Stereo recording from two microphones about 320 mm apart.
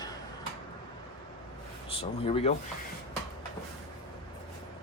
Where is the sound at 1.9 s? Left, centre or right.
Centre.